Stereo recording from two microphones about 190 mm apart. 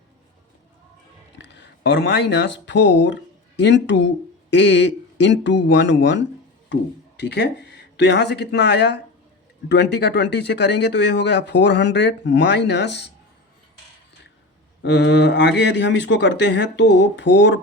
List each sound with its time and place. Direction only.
1.4 s speech: 65° left (ahead or behind)
14.8 s speech: 70° left (ahead or behind)